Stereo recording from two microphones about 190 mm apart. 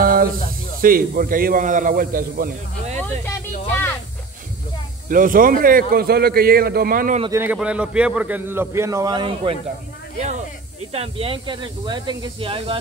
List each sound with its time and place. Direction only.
0.0 s snake: 50° right (ahead or behind)
0.7 s a man's voice: 50° right (ahead or behind)
3.0 s a sound: 10° left (ahead or behind)
5.0 s a man's voice: 45° right (ahead or behind)
7.2 s a man's voice: 15° right (ahead or behind)
10.9 s speech: 30° right (ahead or behind)